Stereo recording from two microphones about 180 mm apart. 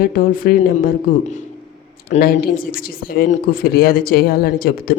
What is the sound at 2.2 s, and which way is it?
A woman's voice, 55° left (ahead or behind).